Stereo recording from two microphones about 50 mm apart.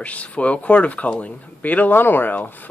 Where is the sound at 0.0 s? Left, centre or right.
Left.